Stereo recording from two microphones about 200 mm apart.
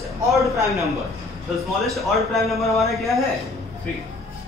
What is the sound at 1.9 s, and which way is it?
A man's voice, centre (ahead or behind).